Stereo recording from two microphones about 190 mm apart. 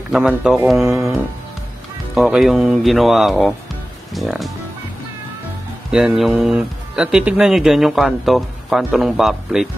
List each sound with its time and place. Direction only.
0.1 s speech: 5° right (ahead or behind)
2.1 s speech: centre (ahead or behind)
5.9 s speech: 5° right (ahead or behind)